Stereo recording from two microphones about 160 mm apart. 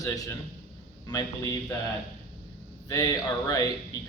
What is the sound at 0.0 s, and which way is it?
Speech, 20° left (ahead or behind).